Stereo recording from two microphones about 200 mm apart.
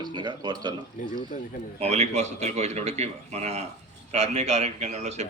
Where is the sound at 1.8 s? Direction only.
35° right (ahead or behind).